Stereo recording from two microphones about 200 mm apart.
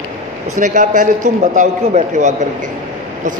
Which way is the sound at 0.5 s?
40° right (ahead or behind).